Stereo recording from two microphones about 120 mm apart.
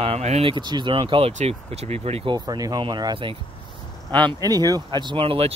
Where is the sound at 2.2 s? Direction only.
35° right (ahead or behind).